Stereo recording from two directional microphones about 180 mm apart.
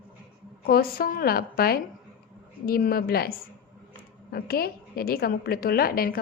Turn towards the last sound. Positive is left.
turn(degrees=55)  # may be behind; listen again after turning